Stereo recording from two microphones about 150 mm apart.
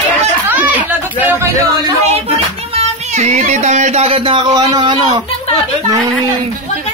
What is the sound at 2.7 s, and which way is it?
Speech, 45° right (ahead or behind).